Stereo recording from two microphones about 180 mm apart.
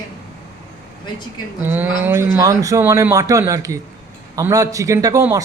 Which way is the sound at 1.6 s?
10° right (ahead or behind).